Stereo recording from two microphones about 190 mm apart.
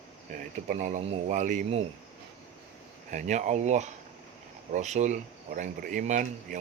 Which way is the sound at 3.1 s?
40° right (ahead or behind).